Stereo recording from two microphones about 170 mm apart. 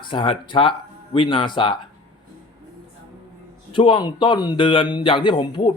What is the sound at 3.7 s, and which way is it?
A man's voice, 30° left (ahead or behind).